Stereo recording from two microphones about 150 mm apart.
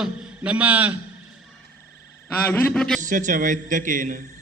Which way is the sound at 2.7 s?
5° left (ahead or behind).